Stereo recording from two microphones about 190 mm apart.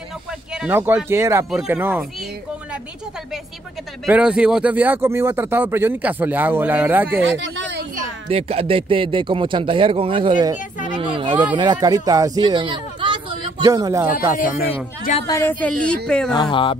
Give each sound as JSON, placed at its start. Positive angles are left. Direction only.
{"t": 0.6, "sound": "speech", "side_deg": -10}
{"t": 4.0, "sound": "speech", "side_deg": -5}
{"t": 7.3, "sound": "a sound", "side_deg": -75}
{"t": 8.0, "sound": "speech", "side_deg": -30}
{"t": 11.0, "sound": "a sound", "side_deg": -25}
{"t": 11.5, "sound": "speech", "side_deg": -25}
{"t": 15.2, "sound": "speech", "side_deg": 15}